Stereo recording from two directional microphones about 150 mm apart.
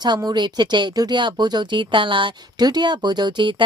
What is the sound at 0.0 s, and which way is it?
Speech, 30° right (ahead or behind).